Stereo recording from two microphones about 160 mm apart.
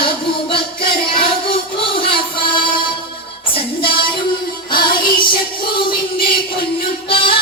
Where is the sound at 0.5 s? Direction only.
30° left (ahead or behind).